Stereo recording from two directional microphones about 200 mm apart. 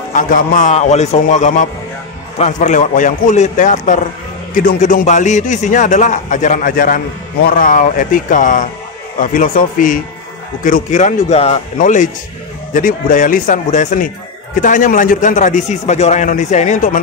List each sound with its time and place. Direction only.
0.1 s a man's voice: 40° left (ahead or behind)